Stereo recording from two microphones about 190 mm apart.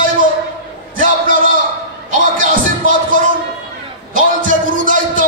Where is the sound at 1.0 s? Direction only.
45° right (ahead or behind).